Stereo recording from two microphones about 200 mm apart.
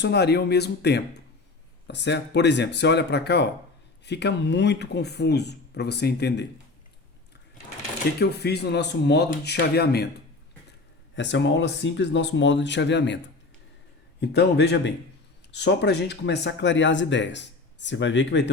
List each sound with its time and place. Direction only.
0.0 s speech: 55° left (ahead or behind)
8.2 s speech: 55° left (ahead or behind)
11.1 s speech: 65° left (ahead or behind)
14.2 s speech: 55° left (ahead or behind)